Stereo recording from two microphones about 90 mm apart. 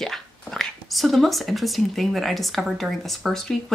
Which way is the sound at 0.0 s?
5° left (ahead or behind).